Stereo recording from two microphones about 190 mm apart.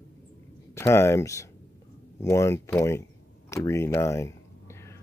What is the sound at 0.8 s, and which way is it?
Speech, 15° left (ahead or behind).